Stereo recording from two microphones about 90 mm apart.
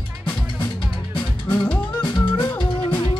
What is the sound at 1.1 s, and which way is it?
Music, 20° left (ahead or behind).